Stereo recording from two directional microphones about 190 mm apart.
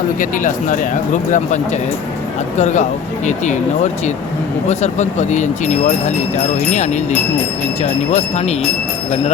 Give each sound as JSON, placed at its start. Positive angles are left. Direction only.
{"t": 0.2, "sound": "speech", "side_deg": 45}
{"t": 4.7, "sound": "speech", "side_deg": 35}